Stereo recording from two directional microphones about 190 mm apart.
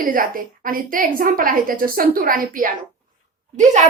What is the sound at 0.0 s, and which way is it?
A woman's voice, 50° right (ahead or behind).